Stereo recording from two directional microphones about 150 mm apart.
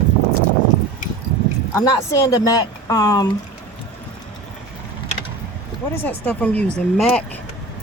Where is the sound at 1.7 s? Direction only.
20° left (ahead or behind).